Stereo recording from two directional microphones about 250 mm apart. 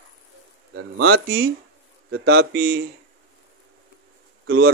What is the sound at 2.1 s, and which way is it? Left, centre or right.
Speech, right.